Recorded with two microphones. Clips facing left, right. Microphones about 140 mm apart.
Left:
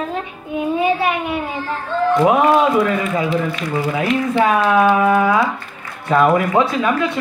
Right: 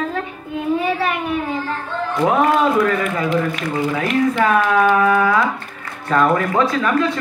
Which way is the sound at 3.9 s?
15° left (ahead or behind).